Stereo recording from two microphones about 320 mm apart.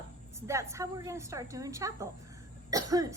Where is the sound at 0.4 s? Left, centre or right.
Centre.